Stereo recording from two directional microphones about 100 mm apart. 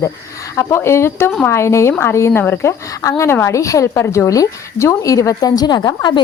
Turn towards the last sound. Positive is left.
turn(degrees=45)  # may be behind; listen again after turning